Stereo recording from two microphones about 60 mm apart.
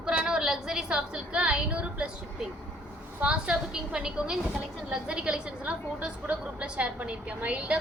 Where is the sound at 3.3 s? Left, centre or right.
Centre.